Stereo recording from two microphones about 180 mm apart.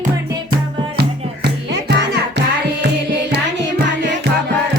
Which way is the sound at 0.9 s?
70° right (ahead or behind).